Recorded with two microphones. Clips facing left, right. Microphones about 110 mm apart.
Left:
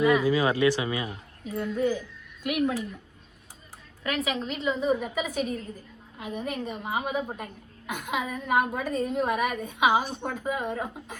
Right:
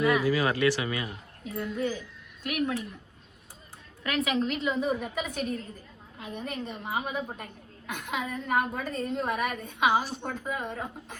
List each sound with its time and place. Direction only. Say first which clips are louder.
0.0 s speech: left 3 dB; 15° left (ahead or behind)
1.5 s a woman's voice: left 3 dB; centre (ahead or behind)
4.0 s a woman's voice: right 2 dB; centre (ahead or behind)